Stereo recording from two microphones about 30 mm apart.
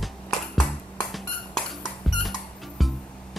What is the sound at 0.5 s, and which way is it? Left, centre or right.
Music, left.